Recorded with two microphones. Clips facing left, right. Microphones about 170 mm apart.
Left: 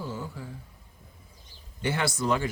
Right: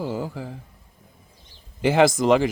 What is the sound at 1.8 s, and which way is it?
Speech, 90° right.